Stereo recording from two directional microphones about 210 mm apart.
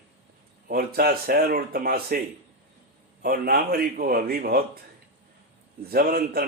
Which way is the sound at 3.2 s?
45° right (ahead or behind).